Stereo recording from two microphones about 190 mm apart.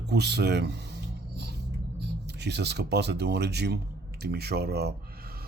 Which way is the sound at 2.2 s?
60° right (ahead or behind).